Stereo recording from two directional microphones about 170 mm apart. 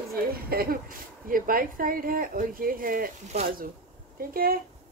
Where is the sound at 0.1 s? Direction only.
60° right (ahead or behind).